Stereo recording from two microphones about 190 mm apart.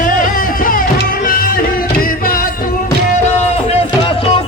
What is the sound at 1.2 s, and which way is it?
Music, 50° left (ahead or behind).